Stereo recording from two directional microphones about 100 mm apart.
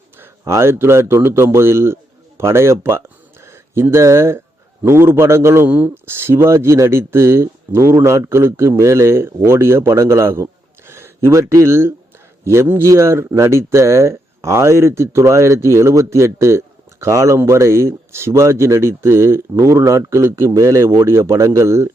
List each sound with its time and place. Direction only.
0.2 s speech: 25° right (ahead or behind)